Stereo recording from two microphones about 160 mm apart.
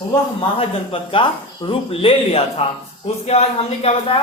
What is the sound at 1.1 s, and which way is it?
A man's voice, 30° left (ahead or behind).